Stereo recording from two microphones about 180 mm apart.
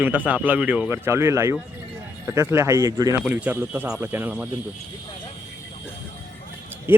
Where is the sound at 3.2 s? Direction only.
10° right (ahead or behind).